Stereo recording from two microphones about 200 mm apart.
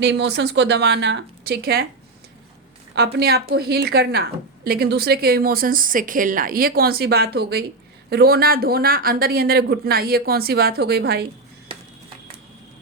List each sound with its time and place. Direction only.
0.0 s speech: 60° right (ahead or behind)
2.9 s a woman's voice: 55° right (ahead or behind)